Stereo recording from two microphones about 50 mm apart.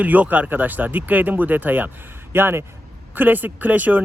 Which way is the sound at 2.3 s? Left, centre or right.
Right.